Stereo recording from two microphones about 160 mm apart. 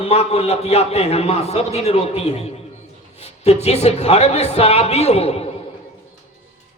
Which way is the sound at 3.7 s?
40° left (ahead or behind).